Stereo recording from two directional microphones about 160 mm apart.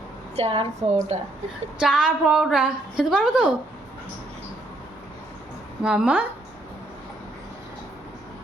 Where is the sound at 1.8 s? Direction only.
5° right (ahead or behind).